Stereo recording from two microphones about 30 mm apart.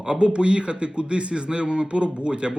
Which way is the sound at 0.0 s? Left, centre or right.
Right.